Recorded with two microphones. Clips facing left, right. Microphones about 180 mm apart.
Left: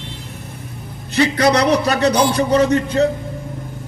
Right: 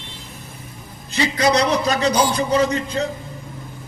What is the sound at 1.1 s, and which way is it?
A man's voice, 65° left (ahead or behind).